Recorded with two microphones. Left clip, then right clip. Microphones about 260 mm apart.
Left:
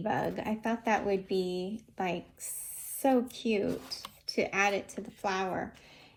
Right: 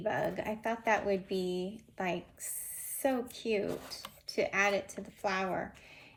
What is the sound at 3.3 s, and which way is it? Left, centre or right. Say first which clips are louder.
Speech: left 2 dB; left.